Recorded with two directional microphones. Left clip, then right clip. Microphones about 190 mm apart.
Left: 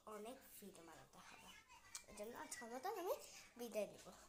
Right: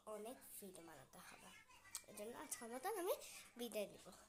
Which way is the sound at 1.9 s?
20° right (ahead or behind).